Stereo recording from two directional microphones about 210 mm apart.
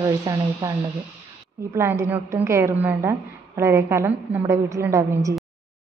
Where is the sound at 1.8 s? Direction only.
10° right (ahead or behind).